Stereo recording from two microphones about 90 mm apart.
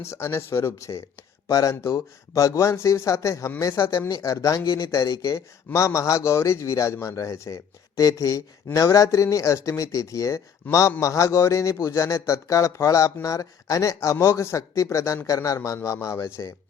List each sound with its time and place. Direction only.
0.0 s a man's voice: 30° left (ahead or behind)
1.7 s a man's voice: 30° left (ahead or behind)